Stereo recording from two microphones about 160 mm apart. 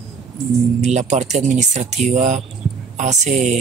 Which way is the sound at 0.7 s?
45° right (ahead or behind).